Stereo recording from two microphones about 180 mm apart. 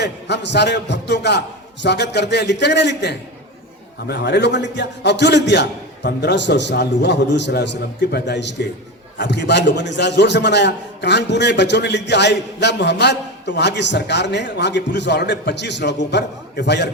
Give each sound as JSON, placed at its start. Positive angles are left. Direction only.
{"t": 0.0, "sound": "a man's voice", "side_deg": 70}